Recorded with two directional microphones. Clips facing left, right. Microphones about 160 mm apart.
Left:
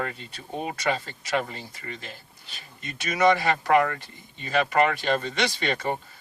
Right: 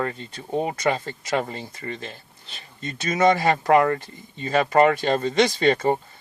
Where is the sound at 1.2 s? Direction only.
25° right (ahead or behind).